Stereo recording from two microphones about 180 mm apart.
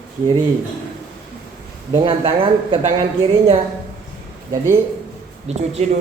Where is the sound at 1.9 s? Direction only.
20° right (ahead or behind).